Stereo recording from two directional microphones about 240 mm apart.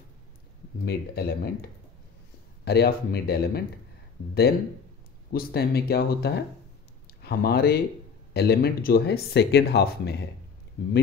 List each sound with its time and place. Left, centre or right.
0.8 s speech: left
2.6 s speech: left
5.3 s speech: left